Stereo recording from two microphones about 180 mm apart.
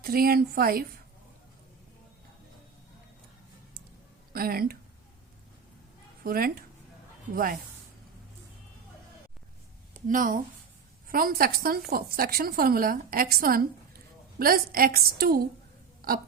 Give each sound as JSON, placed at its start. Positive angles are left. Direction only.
{"t": 0.0, "sound": "a woman's voice", "side_deg": -55}
{"t": 4.3, "sound": "speech", "side_deg": -55}
{"t": 6.2, "sound": "speech", "side_deg": -55}
{"t": 10.1, "sound": "a woman's voice", "side_deg": -50}
{"t": 16.0, "sound": "hiccup", "side_deg": -55}